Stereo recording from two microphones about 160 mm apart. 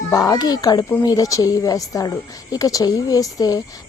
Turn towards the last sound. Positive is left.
turn(degrees=25)  # may be behind; listen again after turning